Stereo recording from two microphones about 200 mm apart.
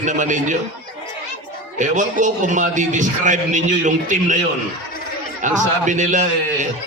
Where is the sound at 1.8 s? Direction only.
40° right (ahead or behind).